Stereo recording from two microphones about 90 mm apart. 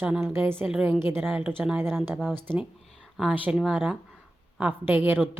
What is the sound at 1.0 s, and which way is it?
Speech, 25° right (ahead or behind).